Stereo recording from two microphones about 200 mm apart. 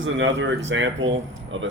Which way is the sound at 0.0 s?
70° right (ahead or behind).